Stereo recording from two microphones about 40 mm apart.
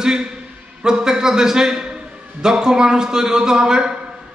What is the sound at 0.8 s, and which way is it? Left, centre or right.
Mantra, centre.